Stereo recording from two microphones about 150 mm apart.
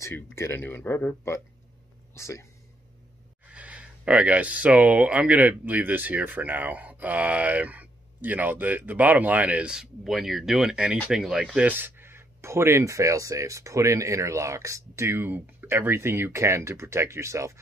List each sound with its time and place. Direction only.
0.4 s speech: 15° left (ahead or behind)
3.5 s speech: 10° right (ahead or behind)